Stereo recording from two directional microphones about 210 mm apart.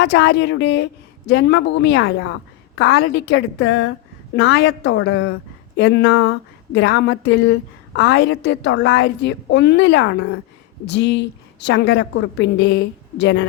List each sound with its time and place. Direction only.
0.0 s a woman's voice: 55° left (ahead or behind)